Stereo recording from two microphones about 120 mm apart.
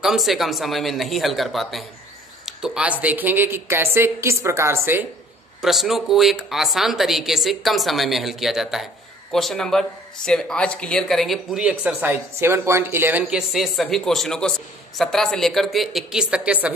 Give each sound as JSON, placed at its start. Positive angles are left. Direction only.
{"t": 0.0, "sound": "speech", "side_deg": 0}
{"t": 5.6, "sound": "speech", "side_deg": 0}